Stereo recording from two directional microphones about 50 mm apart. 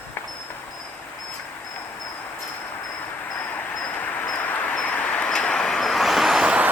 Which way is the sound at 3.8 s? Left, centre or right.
Left.